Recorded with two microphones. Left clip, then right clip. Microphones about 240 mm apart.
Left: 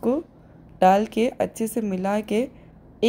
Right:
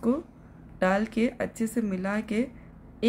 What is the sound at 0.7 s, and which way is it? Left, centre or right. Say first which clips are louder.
A woman's voice: left 8 dB; centre.